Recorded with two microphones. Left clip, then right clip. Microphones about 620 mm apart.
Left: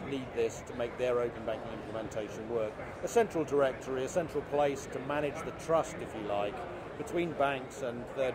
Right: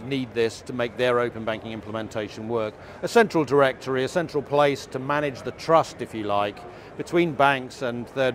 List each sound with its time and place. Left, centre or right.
0.1 s speech: right